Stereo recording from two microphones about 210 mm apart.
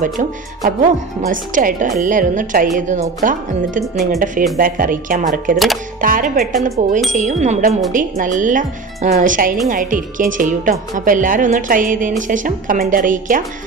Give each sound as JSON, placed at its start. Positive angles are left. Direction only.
{"t": 0.0, "sound": "a woman's voice", "side_deg": -40}
{"t": 3.9, "sound": "speech", "side_deg": 0}
{"t": 4.6, "sound": "a woman's voice", "side_deg": -40}